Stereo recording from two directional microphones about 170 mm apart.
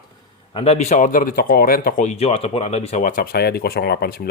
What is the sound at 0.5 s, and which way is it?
Speech, 35° left (ahead or behind).